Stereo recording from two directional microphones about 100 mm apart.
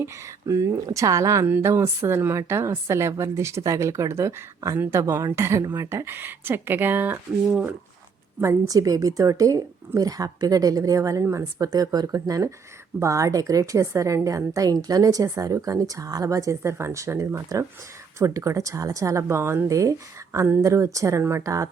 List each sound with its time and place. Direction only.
0.0 s a woman's voice: 30° right (ahead or behind)
1.5 s a woman's voice: 20° right (ahead or behind)
8.4 s a woman's voice: 30° right (ahead or behind)